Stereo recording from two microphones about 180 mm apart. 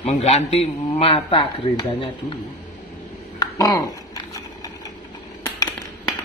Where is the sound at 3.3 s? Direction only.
20° left (ahead or behind).